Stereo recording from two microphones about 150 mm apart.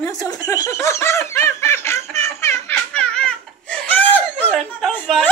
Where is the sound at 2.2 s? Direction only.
20° left (ahead or behind).